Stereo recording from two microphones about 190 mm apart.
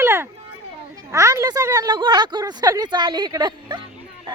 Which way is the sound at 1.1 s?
15° right (ahead or behind).